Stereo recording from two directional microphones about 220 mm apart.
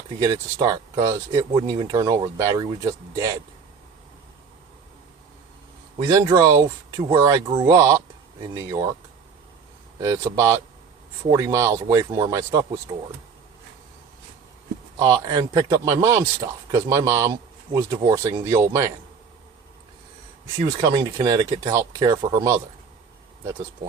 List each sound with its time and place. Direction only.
0.2 s speech: 15° right (ahead or behind)
6.1 s speech: 15° right (ahead or behind)
10.0 s speech: 15° right (ahead or behind)
14.9 s speech: 20° right (ahead or behind)
20.8 s speech: 15° right (ahead or behind)